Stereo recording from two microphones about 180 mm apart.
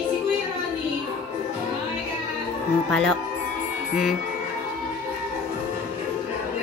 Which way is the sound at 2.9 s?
5° left (ahead or behind).